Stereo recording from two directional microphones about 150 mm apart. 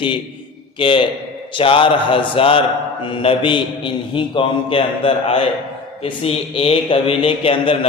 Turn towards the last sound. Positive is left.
turn(degrees=35)  # may be behind; listen again after turning